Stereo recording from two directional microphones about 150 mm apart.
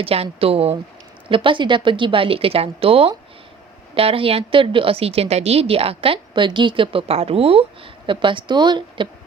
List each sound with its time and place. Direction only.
0.0 s a woman's voice: 40° right (ahead or behind)